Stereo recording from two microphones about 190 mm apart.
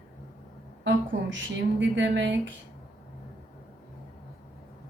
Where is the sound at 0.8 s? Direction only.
75° right (ahead or behind).